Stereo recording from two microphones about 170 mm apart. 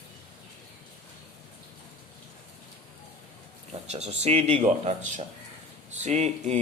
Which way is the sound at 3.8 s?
40° right (ahead or behind).